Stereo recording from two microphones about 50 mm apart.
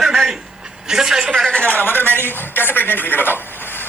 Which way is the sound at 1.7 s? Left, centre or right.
Left.